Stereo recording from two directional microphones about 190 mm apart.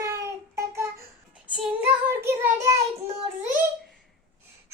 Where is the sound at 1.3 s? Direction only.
5° right (ahead or behind).